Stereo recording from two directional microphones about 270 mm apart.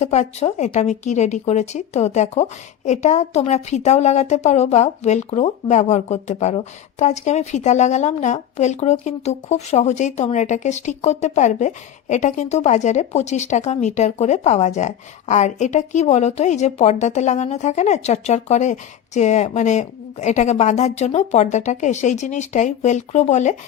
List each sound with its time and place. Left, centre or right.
0.0 s speech: left